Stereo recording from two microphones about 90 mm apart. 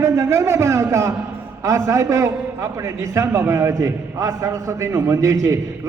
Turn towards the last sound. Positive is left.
turn(degrees=-35)  # may be behind; listen again after turning